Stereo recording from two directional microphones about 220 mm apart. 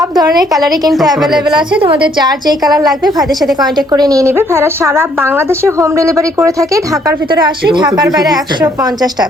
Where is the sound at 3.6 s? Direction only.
20° right (ahead or behind).